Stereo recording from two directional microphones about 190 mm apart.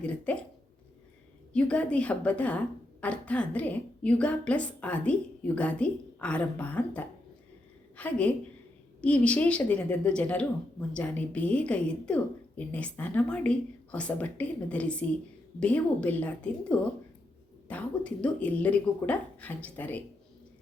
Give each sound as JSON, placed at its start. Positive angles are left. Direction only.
{"t": 0.3, "sound": "speech", "side_deg": 5}
{"t": 1.5, "sound": "a woman's voice", "side_deg": 5}